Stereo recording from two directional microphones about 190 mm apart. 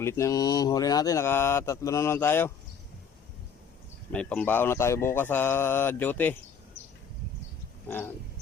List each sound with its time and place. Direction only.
0.0 s speech: 15° left (ahead or behind)
4.1 s speech: 5° left (ahead or behind)
7.9 s speech: 10° left (ahead or behind)